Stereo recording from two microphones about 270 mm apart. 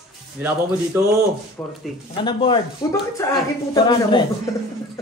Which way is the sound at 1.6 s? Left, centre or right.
Centre.